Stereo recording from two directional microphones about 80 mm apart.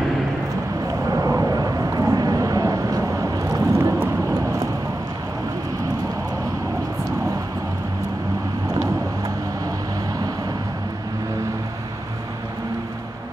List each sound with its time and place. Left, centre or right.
1.1 s vehicle: right
3.4 s vehicle: right